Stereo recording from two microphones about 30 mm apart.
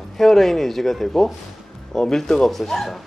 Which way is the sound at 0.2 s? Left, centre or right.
Centre.